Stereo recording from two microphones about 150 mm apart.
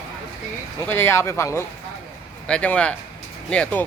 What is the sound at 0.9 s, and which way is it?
Speech, 15° left (ahead or behind).